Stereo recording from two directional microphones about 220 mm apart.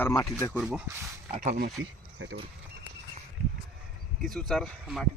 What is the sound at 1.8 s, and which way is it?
Speech, 60° right (ahead or behind).